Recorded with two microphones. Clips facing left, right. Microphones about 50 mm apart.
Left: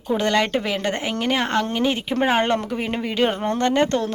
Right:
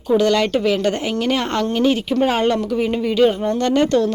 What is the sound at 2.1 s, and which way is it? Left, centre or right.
Speech, left.